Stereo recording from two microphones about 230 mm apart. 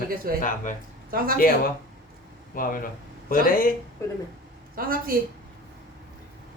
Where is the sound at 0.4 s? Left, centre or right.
Left.